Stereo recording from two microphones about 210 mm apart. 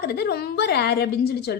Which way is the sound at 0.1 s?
50° left (ahead or behind).